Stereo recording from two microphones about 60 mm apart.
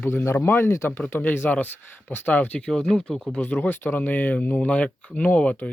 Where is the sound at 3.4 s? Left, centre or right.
Left.